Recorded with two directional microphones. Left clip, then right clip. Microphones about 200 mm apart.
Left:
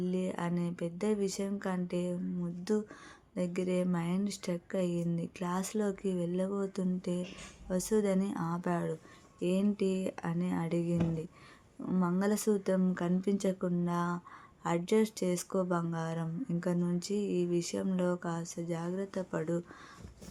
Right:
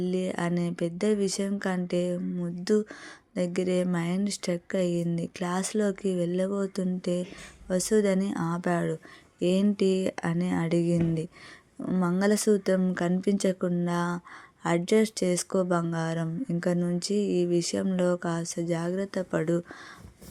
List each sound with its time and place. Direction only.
0.0 s speech: 25° right (ahead or behind)